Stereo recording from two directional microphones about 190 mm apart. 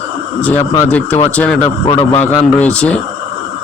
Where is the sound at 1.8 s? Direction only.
30° left (ahead or behind).